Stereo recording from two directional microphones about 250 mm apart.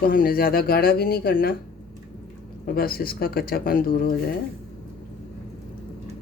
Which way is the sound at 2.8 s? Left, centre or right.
Left.